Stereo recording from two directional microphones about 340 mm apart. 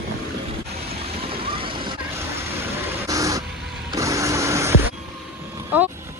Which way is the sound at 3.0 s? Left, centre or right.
Centre.